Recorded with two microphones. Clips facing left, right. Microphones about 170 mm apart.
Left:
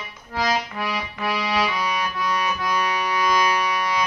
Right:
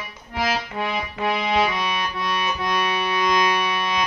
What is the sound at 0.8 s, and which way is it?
Music, 25° right (ahead or behind).